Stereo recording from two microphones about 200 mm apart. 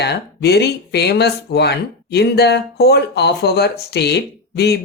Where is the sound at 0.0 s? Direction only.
55° left (ahead or behind).